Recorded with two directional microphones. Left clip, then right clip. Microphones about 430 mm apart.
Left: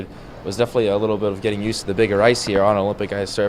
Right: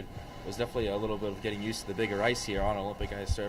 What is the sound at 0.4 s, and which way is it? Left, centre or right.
Speech, left.